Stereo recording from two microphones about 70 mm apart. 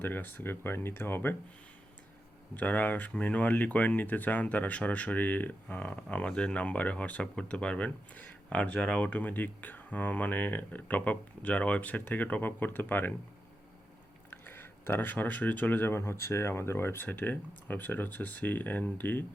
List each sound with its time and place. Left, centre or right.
0.0 s speech: left
2.6 s speech: left
9.0 s speech: left
14.3 s speech: left